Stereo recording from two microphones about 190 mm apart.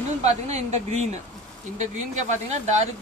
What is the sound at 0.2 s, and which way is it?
Speech, 35° right (ahead or behind).